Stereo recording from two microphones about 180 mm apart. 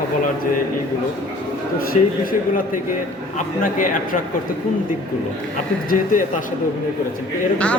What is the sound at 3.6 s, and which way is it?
Speech, 50° left (ahead or behind).